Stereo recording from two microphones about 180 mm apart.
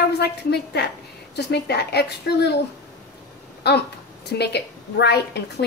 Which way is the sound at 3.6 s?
70° left (ahead or behind).